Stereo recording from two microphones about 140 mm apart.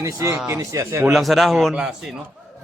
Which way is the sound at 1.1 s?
Centre (ahead or behind).